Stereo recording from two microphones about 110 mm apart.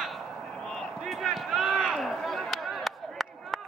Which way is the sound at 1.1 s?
Centre (ahead or behind).